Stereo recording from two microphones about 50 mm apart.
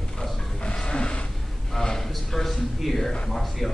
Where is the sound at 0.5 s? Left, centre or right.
Centre.